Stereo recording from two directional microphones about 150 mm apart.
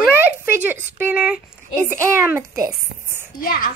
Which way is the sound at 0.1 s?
15° right (ahead or behind).